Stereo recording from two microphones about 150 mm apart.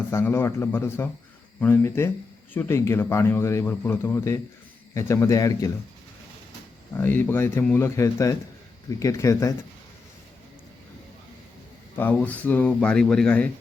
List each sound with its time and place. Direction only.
0.1 s speech: 15° left (ahead or behind)
6.9 s speech: 15° left (ahead or behind)
11.9 s speech: 10° left (ahead or behind)